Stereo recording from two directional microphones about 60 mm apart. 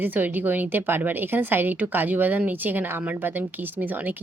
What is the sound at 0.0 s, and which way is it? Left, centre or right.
A woman's voice, right.